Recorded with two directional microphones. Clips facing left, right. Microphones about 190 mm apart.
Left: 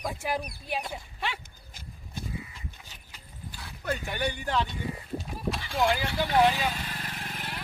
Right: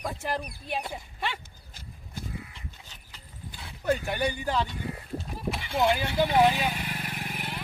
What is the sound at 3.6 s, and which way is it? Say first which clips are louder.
Speech: right 5 dB; 15° right (ahead or behind).